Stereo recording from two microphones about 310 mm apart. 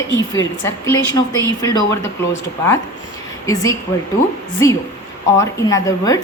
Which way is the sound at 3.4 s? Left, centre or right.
Centre.